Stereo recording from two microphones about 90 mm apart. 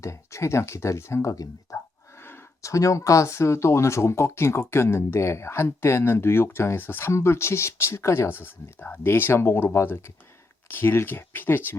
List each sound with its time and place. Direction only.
0.0 s speech: 35° left (ahead or behind)